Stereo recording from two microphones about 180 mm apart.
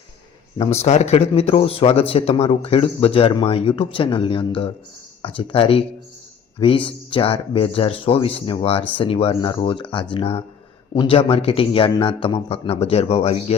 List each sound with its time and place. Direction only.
0.6 s a man's voice: 35° left (ahead or behind)